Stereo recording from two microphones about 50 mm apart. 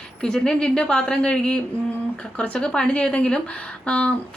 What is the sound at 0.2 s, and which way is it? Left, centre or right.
A woman's voice, centre.